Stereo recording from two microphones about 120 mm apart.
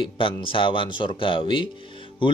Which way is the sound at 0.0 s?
45° left (ahead or behind).